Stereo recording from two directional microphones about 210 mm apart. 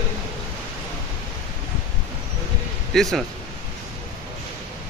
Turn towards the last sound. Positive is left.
turn(degrees=0)  # may be behind; listen again after turning